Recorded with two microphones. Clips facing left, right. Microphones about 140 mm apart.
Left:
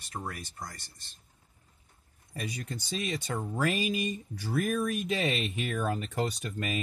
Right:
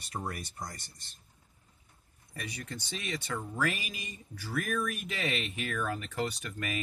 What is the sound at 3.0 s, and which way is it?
Speech, 25° left (ahead or behind).